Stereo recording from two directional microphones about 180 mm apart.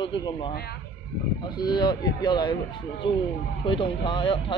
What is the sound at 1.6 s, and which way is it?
Speech, 25° left (ahead or behind).